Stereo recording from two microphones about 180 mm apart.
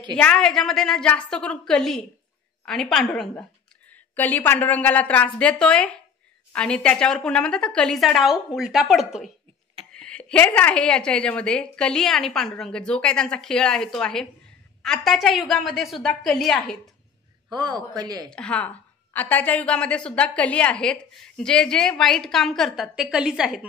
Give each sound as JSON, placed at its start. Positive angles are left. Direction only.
{"t": 0.2, "sound": "a woman's voice", "side_deg": 5}
{"t": 17.5, "sound": "speech", "side_deg": -25}
{"t": 18.3, "sound": "a woman's voice", "side_deg": 5}